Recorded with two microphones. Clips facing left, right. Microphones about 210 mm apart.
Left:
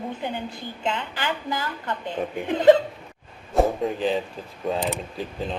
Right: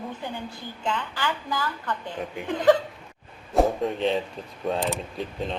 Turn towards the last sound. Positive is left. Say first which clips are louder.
# even
turn(degrees=0)  # may be behind; listen again after turning